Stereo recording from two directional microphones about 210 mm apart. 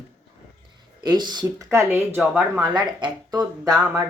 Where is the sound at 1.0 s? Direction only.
20° right (ahead or behind).